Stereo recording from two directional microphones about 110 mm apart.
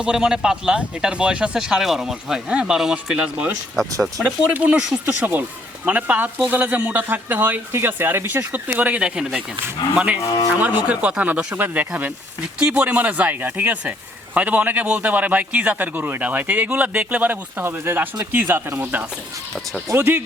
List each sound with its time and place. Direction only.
0.0 s speech: 5° right (ahead or behind)